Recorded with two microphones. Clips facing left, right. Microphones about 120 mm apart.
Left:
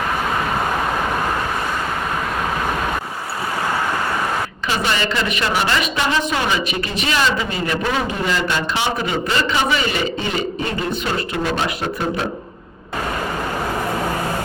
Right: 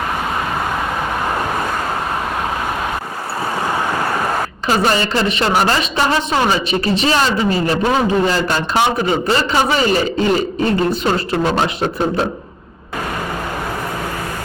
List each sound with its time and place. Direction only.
4.7 s a woman's voice: 40° right (ahead or behind)